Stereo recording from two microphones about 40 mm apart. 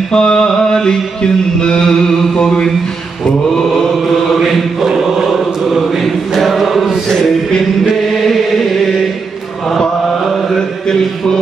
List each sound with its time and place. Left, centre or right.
0.1 s mantra: centre
4.3 s chant: centre
7.9 s chant: centre
9.7 s mantra: centre
10.5 s a sound: centre